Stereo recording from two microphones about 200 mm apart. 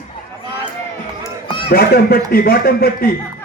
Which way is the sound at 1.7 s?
50° left (ahead or behind).